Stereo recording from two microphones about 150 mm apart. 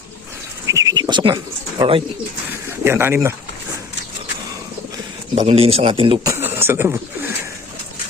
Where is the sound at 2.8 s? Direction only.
15° right (ahead or behind).